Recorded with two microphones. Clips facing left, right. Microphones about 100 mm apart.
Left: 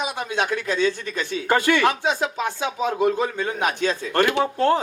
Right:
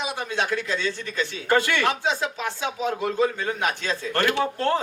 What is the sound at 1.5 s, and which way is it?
Speech, 20° left (ahead or behind).